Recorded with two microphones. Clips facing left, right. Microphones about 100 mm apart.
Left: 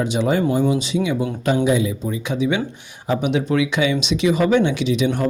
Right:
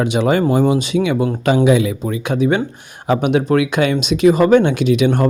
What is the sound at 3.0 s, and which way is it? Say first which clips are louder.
Speech: right 4 dB; 75° right (ahead or behind).